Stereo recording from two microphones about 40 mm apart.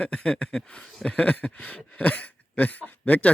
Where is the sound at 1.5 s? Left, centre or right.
Left.